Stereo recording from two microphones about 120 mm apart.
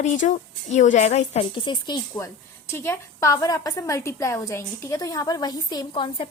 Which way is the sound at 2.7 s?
25° left (ahead or behind).